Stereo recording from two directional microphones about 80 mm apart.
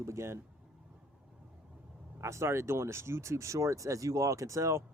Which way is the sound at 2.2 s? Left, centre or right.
Right.